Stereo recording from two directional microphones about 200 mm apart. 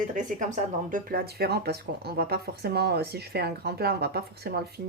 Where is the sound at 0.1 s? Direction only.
40° right (ahead or behind).